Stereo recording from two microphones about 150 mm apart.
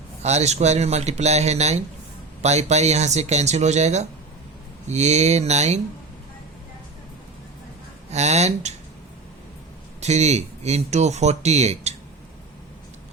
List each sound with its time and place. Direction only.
0.2 s speech: 45° right (ahead or behind)
8.1 s speech: 45° right (ahead or behind)
10.0 s speech: 50° right (ahead or behind)